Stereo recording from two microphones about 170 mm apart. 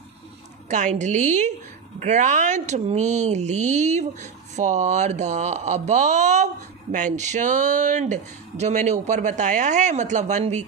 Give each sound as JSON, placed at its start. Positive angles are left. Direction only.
{"t": 0.7, "sound": "speech", "side_deg": -45}